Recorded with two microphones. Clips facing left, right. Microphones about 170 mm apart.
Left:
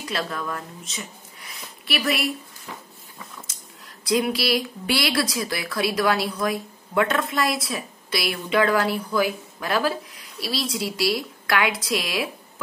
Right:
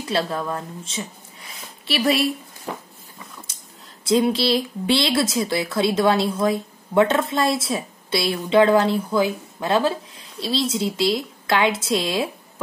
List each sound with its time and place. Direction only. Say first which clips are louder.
0.0 s speech: right 5 dB; 30° right (ahead or behind)
4.0 s speech: right 4 dB; 25° right (ahead or behind)